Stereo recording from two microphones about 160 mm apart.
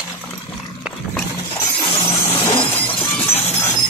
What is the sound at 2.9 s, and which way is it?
Shatter, 35° left (ahead or behind).